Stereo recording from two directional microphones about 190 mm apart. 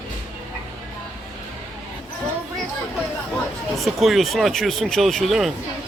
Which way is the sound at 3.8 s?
Centre (ahead or behind).